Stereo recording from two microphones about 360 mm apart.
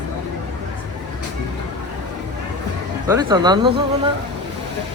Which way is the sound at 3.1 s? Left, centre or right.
Centre.